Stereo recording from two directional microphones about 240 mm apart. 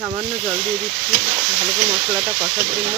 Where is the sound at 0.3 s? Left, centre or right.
Right.